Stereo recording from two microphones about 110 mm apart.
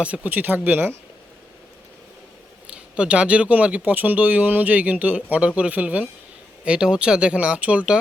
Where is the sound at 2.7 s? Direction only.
10° right (ahead or behind).